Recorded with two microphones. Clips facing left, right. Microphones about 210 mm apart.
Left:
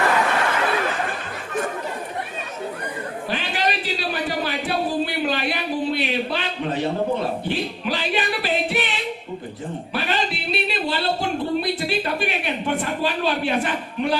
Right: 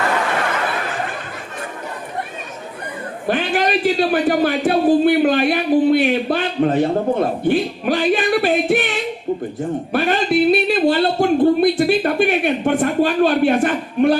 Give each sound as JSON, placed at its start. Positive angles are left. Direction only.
{"t": 3.2, "sound": "a man's voice", "side_deg": -50}
{"t": 9.9, "sound": "a man's voice", "side_deg": -50}